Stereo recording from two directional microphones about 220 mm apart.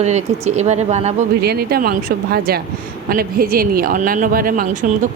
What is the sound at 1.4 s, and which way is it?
Speech, 45° right (ahead or behind).